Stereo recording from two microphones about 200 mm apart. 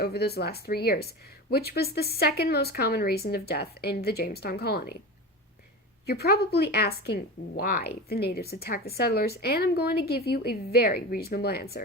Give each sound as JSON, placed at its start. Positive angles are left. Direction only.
{"t": 0.0, "sound": "speech", "side_deg": 55}
{"t": 6.1, "sound": "speech", "side_deg": 50}